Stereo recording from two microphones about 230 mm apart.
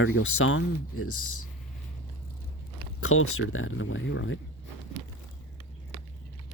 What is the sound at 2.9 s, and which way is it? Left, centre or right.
Speech, left.